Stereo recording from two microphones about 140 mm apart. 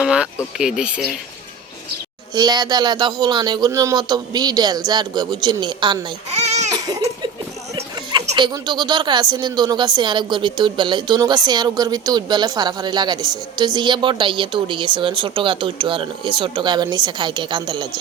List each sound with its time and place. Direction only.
0.0 s a sound: 5° right (ahead or behind)
0.6 s speech: 5° right (ahead or behind)
2.3 s a woman's voice: 30° right (ahead or behind)
6.3 s baby cry: 50° right (ahead or behind)
7.8 s music: 20° right (ahead or behind)
8.4 s a woman's voice: 30° right (ahead or behind)